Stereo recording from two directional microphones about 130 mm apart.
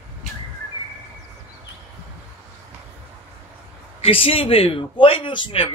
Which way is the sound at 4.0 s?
45° left (ahead or behind).